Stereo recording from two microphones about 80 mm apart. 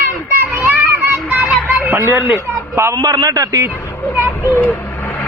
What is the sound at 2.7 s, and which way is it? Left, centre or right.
Speech, right.